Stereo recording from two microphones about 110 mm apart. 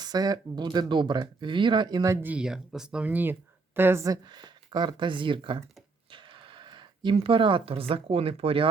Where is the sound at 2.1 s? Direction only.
15° right (ahead or behind).